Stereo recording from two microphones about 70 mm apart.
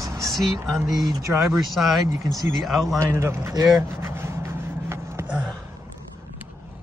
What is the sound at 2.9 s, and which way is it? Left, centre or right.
Speech, right.